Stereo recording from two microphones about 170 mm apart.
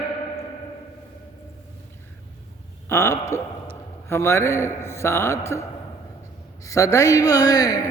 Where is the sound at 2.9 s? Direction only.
15° left (ahead or behind).